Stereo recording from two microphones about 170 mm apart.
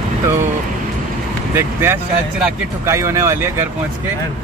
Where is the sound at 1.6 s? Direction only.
15° right (ahead or behind).